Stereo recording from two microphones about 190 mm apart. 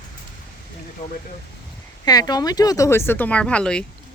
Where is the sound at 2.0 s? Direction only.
20° left (ahead or behind); by 3.8 s 5° left (ahead or behind).